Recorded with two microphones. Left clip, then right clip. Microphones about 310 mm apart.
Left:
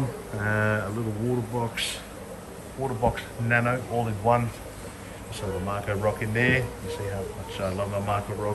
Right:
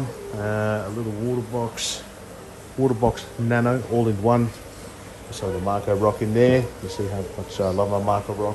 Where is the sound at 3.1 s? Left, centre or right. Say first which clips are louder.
Right 1 dB; centre.